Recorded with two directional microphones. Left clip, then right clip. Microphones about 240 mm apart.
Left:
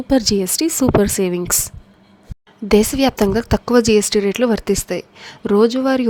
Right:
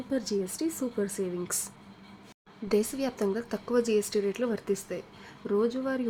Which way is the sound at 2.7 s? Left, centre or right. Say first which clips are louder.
Left 14 dB; left.